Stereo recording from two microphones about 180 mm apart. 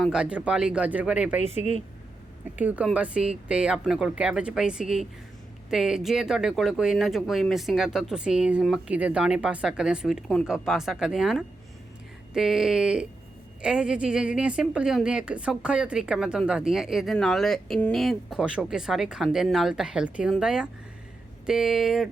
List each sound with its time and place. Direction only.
0.0 s speech: 5° right (ahead or behind)
1.4 s speech: 40° left (ahead or behind)
2.6 s a woman's voice: 10° right (ahead or behind)